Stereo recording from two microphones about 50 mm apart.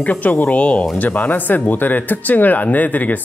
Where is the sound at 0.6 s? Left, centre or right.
Left.